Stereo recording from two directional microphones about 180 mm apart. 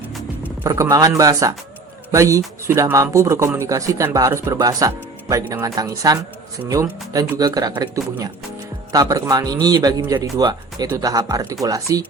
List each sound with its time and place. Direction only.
0.6 s a man's voice: 20° right (ahead or behind)